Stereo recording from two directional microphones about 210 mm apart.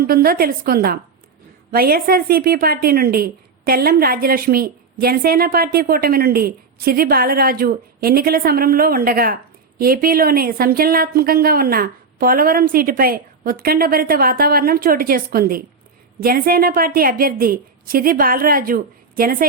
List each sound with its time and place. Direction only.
0.0 s a woman's voice: 45° right (ahead or behind)